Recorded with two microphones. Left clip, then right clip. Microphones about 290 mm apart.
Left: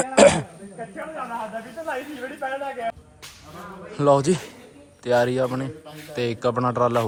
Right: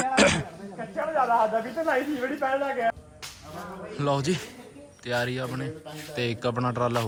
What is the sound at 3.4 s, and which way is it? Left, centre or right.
A man's voice, centre.